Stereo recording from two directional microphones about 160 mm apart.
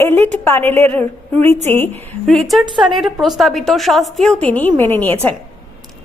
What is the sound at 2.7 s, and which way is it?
Speech, 30° right (ahead or behind).